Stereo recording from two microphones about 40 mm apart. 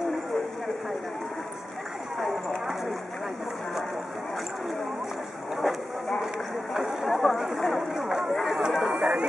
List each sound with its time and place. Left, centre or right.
5.6 s vehicle: centre
6.7 s a sound: centre
7.2 s chatter: centre
7.5 s a sound: centre
8.3 s chatter: centre
8.5 s chatter: centre